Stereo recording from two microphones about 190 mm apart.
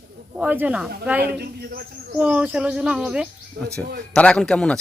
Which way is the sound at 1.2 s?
55° right (ahead or behind).